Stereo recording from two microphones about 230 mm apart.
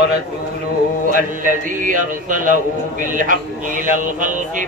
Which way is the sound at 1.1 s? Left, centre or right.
Right.